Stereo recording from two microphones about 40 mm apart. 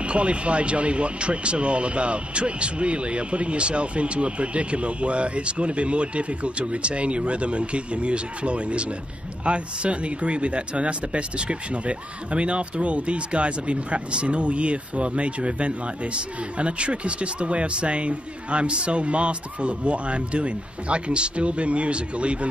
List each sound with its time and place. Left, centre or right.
0.0 s speech: right